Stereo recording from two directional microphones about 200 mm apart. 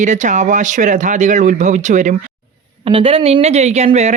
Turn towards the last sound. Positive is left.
turn(degrees=-35)  # may be behind; listen again after turning